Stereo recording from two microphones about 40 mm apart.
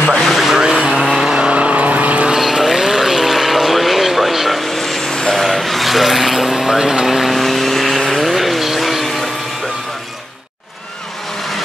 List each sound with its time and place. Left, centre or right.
0.1 s vehicle: centre
0.6 s vehicle: centre
1.5 s vehicle: right
2.3 s vehicle: centre
5.3 s vehicle: centre